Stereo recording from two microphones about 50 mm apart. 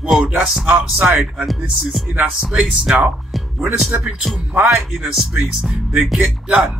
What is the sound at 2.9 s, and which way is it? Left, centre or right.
Speech, right.